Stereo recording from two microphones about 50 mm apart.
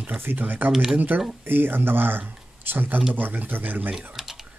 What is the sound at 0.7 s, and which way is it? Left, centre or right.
Speech, centre.